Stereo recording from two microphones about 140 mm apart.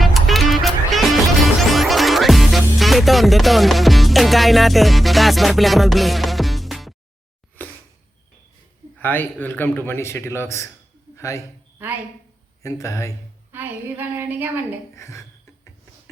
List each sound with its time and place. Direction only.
0.0 s music: centre (ahead or behind)
7.6 s a sound: 10° left (ahead or behind)
9.0 s a man's voice: 15° left (ahead or behind)
12.6 s speech: 20° left (ahead or behind)
13.5 s a woman's voice: 15° right (ahead or behind)
14.9 s speech: 20° left (ahead or behind)